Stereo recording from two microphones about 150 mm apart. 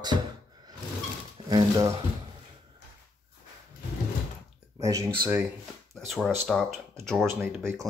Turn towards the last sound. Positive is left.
turn(degrees=-15)  # may be behind; listen again after turning